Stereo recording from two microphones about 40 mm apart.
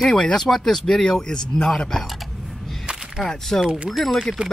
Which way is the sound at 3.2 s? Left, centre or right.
Centre.